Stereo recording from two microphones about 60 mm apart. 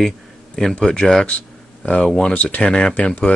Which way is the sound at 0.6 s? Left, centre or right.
Centre.